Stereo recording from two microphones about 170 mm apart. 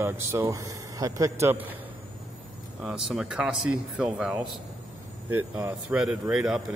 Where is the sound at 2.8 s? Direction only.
5° right (ahead or behind).